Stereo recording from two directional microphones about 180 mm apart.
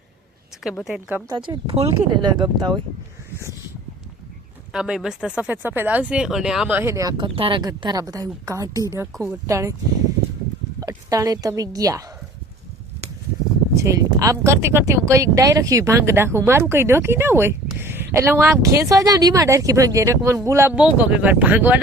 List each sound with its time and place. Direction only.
0.6 s a woman's voice: centre (ahead or behind)
1.3 s speech: 25° right (ahead or behind)
4.7 s speech: 5° right (ahead or behind)
10.8 s a woman's voice: 20° right (ahead or behind)
13.7 s speech: 15° right (ahead or behind)